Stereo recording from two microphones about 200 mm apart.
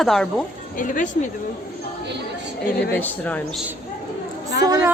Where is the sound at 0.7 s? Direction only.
40° left (ahead or behind).